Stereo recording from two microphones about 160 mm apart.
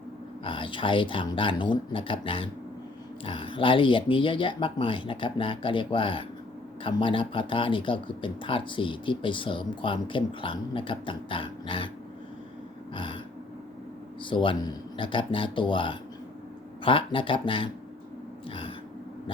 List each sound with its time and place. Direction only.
0.4 s speech: 30° left (ahead or behind)
12.9 s throat clearing: 30° left (ahead or behind)
14.3 s speech: 30° left (ahead or behind)